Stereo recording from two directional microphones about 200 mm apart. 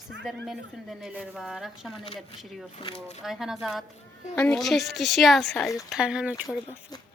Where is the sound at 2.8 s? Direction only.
30° left (ahead or behind).